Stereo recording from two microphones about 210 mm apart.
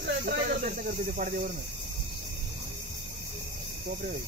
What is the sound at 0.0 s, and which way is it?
Snake, 55° right (ahead or behind).